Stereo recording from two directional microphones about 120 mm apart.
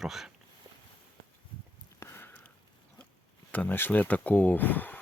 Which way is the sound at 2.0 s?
20° left (ahead or behind).